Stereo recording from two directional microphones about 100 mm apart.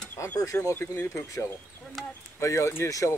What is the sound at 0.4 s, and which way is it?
Speech, 30° left (ahead or behind).